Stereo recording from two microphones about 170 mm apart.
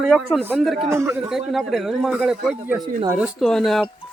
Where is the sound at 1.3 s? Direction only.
Centre (ahead or behind).